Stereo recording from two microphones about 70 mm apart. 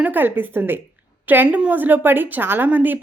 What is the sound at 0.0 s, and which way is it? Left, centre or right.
Speech, right.